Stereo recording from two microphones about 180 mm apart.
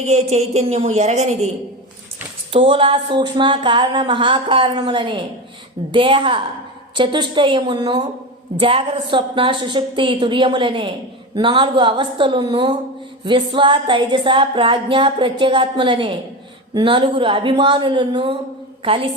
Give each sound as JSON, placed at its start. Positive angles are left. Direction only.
{"t": 0.0, "sound": "a woman's voice", "side_deg": -35}
{"t": 2.5, "sound": "a sound", "side_deg": -30}
{"t": 18.8, "sound": "a woman's voice", "side_deg": -30}